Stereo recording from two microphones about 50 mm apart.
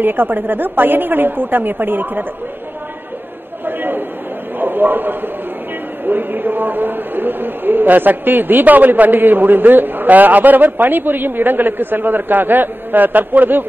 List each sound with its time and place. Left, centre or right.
0.0 s a woman's voice: right
3.6 s a sound: right
6.0 s a man's voice: right